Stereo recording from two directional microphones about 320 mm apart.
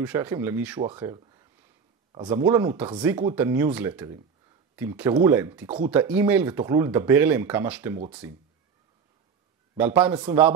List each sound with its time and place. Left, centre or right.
0.0 s speech: centre
9.8 s speech: centre